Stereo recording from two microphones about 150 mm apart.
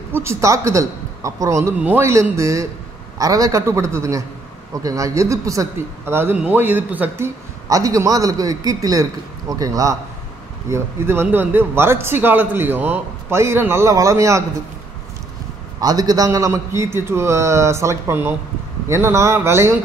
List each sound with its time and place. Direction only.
0.1 s a man's voice: 15° right (ahead or behind)
7.6 s a man's voice: 20° right (ahead or behind)
15.8 s a man's voice: 25° right (ahead or behind)